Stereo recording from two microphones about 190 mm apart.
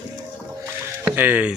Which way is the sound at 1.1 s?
10° right (ahead or behind).